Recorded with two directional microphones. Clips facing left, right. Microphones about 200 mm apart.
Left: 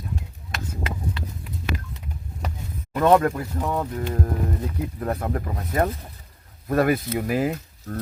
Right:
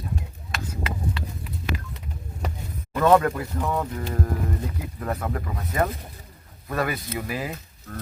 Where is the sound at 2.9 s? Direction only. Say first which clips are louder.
Left 1 dB; 25° left (ahead or behind).